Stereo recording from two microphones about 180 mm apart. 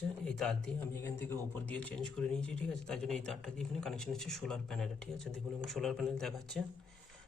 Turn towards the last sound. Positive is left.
turn(degrees=0)  # may be behind; listen again after turning